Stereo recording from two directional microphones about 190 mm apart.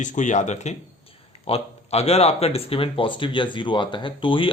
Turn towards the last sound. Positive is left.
turn(degrees=25)  # may be behind; listen again after turning